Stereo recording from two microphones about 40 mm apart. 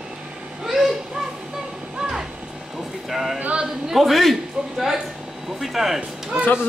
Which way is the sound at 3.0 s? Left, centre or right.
Centre.